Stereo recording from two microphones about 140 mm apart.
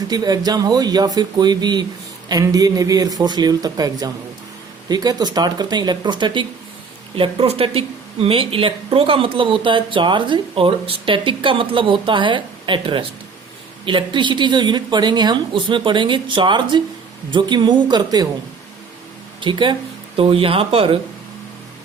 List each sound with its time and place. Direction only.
0.1 s speech: 30° right (ahead or behind)
19.4 s speech: 35° right (ahead or behind)